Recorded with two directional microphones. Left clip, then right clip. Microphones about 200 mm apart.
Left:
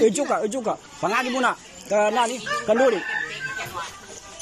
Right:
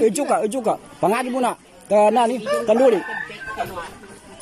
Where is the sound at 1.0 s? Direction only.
20° right (ahead or behind).